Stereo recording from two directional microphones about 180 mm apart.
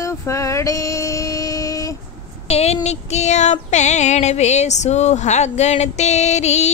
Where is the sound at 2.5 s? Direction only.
35° left (ahead or behind).